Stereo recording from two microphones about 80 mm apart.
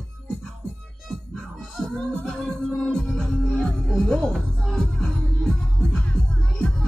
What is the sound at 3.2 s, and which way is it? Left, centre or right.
Music, left.